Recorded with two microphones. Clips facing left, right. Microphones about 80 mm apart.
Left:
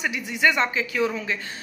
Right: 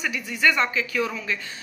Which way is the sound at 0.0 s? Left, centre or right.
Left.